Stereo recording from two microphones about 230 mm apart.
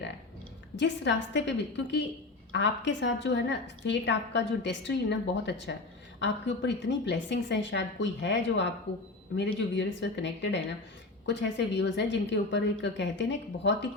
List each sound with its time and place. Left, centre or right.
0.8 s a woman's voice: left